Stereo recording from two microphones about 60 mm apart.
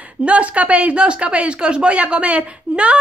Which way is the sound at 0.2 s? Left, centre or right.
Right.